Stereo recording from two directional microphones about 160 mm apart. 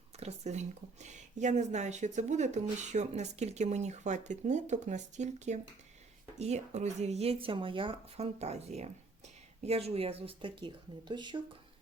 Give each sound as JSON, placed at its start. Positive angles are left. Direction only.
{"t": 0.2, "sound": "speech", "side_deg": -45}